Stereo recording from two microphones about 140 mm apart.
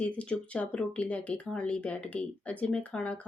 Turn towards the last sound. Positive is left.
turn(degrees=10)  # may be behind; listen again after turning